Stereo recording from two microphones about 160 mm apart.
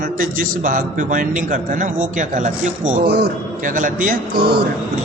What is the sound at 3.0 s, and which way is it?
A man's voice, 90° right.